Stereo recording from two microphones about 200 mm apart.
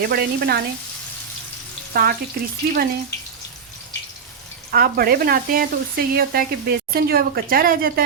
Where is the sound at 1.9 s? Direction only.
50° right (ahead or behind).